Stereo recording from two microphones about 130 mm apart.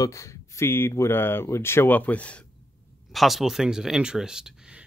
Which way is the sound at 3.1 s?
Centre (ahead or behind).